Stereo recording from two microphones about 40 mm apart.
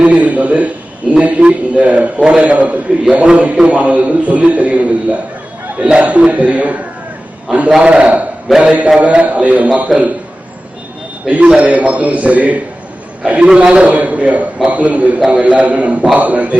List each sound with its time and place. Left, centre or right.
0.0 s a sound: right
1.1 s a man's voice: right
7.8 s a man's voice: right
9.9 s a man's voice: centre
11.3 s a man's voice: right